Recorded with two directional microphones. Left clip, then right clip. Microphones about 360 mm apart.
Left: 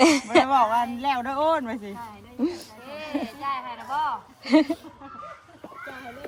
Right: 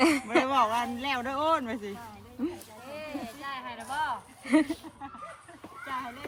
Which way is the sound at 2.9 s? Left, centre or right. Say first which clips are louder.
Left 7 dB; left.